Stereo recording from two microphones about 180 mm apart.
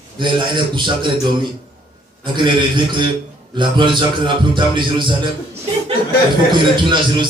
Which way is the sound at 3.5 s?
25° right (ahead or behind).